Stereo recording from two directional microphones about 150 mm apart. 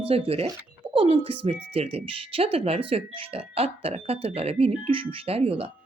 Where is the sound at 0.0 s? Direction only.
40° right (ahead or behind).